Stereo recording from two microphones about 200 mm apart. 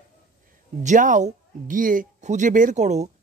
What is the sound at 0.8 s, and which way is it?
Speech, 40° right (ahead or behind).